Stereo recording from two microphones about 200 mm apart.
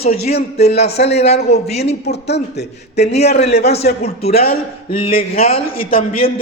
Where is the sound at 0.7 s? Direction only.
55° left (ahead or behind).